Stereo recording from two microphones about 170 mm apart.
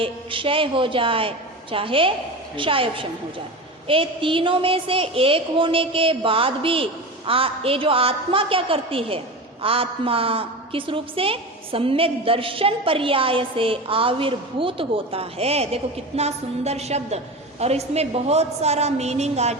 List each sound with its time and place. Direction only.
0.0 s a woman's voice: 30° right (ahead or behind)